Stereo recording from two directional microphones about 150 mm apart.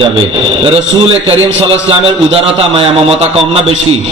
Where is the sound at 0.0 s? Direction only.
35° right (ahead or behind).